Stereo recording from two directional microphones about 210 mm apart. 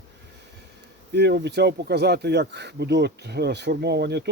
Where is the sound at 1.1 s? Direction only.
55° right (ahead or behind).